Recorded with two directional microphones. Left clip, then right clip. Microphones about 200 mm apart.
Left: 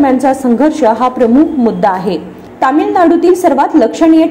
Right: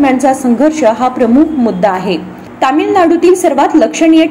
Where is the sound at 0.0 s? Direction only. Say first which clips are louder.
Even; 5° right (ahead or behind).